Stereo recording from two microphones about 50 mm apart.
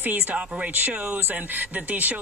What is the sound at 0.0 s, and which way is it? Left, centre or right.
Speech, right.